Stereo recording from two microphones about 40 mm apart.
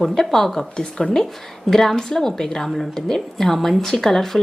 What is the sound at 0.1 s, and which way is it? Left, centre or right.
A woman's voice, centre.